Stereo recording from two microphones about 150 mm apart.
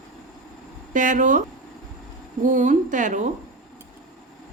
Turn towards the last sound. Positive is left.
turn(degrees=-55)  # may be behind; listen again after turning